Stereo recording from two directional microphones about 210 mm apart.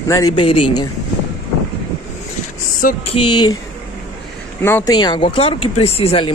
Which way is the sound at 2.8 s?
40° left (ahead or behind).